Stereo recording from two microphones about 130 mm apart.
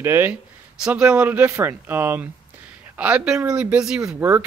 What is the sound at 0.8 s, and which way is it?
Speech, 10° right (ahead or behind).